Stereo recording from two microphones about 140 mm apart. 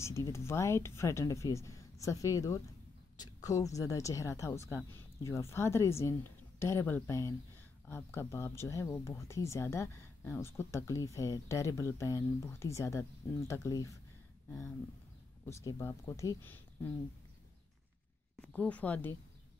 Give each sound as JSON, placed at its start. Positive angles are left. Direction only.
{"t": 0.0, "sound": "speech", "side_deg": 20}
{"t": 15.4, "sound": "speech", "side_deg": 20}
{"t": 18.4, "sound": "speech", "side_deg": 10}